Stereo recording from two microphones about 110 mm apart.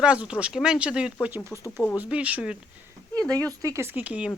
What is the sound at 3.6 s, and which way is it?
Speech, 25° right (ahead or behind).